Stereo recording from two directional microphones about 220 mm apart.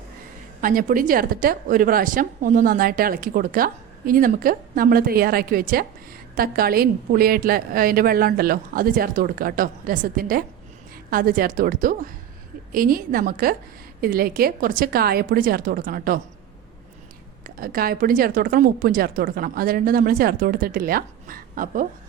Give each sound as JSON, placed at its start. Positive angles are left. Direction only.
{"t": 0.6, "sound": "a woman's voice", "side_deg": -40}
{"t": 17.4, "sound": "a woman's voice", "side_deg": -40}